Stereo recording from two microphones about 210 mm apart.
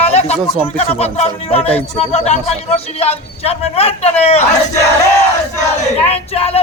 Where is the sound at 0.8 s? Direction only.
30° left (ahead or behind).